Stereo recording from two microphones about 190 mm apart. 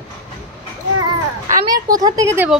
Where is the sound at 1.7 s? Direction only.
20° right (ahead or behind).